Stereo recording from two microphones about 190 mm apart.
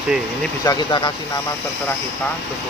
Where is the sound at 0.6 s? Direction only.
20° left (ahead or behind).